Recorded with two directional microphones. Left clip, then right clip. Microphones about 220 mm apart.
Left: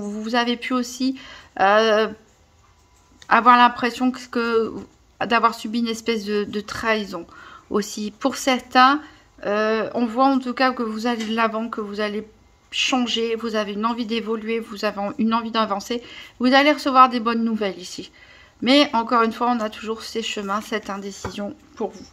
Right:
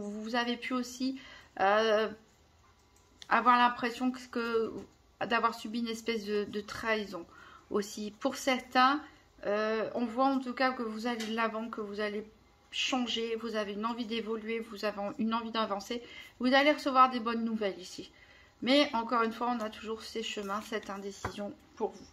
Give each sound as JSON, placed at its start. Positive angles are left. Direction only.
{"t": 0.0, "sound": "speech", "side_deg": 35}
{"t": 3.3, "sound": "speech", "side_deg": 35}